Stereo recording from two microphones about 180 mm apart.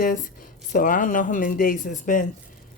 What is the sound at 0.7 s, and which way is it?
Speech, 50° left (ahead or behind).